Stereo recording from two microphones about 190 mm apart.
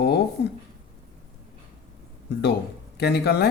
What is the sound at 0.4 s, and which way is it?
Speech, 60° left (ahead or behind).